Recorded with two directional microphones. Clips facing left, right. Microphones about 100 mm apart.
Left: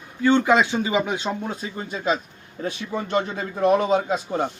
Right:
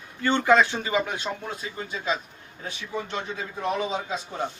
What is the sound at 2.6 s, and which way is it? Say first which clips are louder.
A man's voice: left 5 dB; 55° left (ahead or behind).